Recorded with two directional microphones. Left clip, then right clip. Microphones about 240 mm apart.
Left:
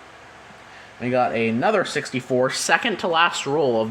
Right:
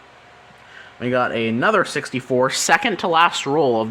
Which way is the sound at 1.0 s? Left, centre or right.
Right.